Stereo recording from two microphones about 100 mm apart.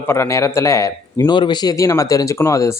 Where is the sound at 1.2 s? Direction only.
50° left (ahead or behind); by 2.8 s 30° left (ahead or behind).